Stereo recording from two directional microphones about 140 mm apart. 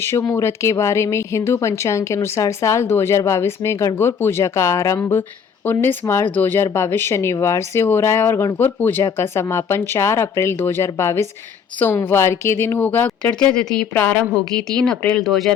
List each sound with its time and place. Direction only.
0.0 s a woman's voice: 15° left (ahead or behind); by 15.5 s centre (ahead or behind)